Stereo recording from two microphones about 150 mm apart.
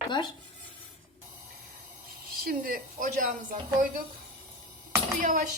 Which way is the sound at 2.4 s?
75° right (ahead or behind).